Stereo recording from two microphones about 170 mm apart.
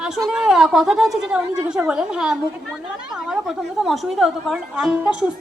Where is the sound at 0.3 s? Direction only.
5° right (ahead or behind).